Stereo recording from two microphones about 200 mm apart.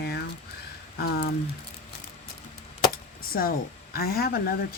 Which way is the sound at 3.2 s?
45° left (ahead or behind).